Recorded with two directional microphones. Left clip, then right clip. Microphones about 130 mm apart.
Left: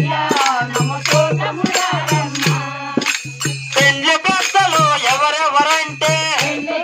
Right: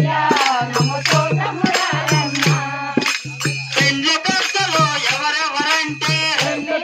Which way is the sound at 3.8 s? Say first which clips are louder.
Left 4 dB; 30° left (ahead or behind).